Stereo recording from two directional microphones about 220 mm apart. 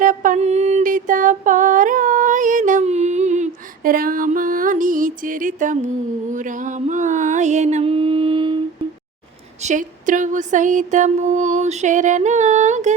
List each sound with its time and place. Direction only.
0.0 s a sound: 35° right (ahead or behind)
6.3 s music: 35° right (ahead or behind)
9.6 s mantra: 35° right (ahead or behind)